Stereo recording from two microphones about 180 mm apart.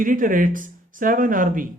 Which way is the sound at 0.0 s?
50° right (ahead or behind).